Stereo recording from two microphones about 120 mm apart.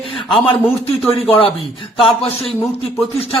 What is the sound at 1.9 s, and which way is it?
Speech, 50° left (ahead or behind).